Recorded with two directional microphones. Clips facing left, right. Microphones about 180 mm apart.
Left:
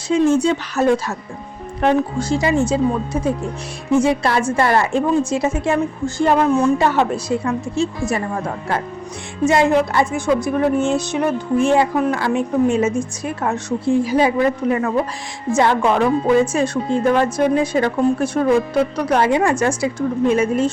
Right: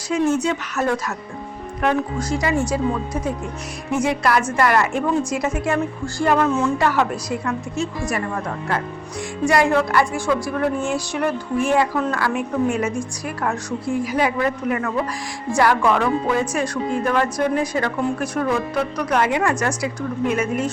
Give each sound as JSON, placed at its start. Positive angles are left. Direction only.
{"t": 0.1, "sound": "speech", "side_deg": 30}
{"t": 9.4, "sound": "speech", "side_deg": 25}